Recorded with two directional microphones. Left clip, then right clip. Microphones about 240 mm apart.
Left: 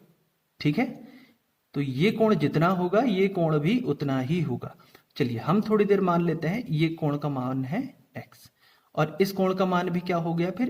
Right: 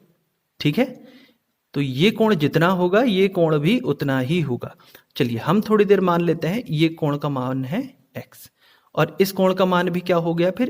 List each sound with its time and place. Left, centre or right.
0.6 s speech: right